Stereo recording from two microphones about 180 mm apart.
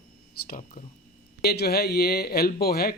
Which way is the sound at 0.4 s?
50° left (ahead or behind).